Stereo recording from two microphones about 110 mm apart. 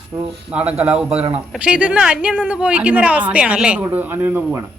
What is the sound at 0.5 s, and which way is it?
A woman's voice, 10° right (ahead or behind).